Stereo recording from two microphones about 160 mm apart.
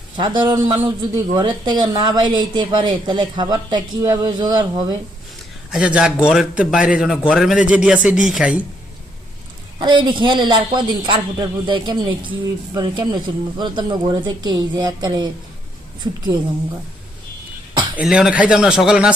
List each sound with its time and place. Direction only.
0.2 s speech: 25° right (ahead or behind)
5.7 s a man's voice: 5° right (ahead or behind)
9.7 s speech: 30° right (ahead or behind)
17.9 s a man's voice: 5° right (ahead or behind)